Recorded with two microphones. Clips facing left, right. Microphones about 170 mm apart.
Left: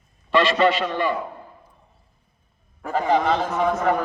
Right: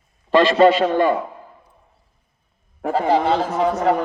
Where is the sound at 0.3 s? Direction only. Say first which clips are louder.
Right 5 dB; 40° right (ahead or behind).